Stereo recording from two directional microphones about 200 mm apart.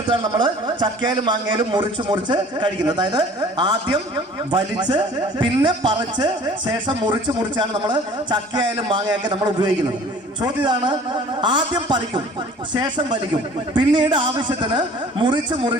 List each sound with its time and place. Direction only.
0.2 s speech: 20° right (ahead or behind)